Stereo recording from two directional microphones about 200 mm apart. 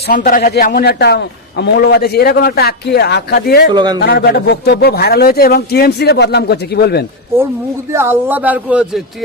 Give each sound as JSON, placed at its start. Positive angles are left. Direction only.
{"t": 0.1, "sound": "a man's voice", "side_deg": 45}
{"t": 3.7, "sound": "speech", "side_deg": -20}
{"t": 4.0, "sound": "a man's voice", "side_deg": 55}
{"t": 7.9, "sound": "speech", "side_deg": -10}